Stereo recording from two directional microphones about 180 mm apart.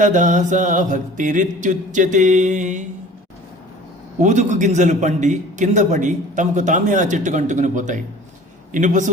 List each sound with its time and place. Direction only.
0.0 s a man's voice: 45° right (ahead or behind)
4.2 s a man's voice: 40° right (ahead or behind)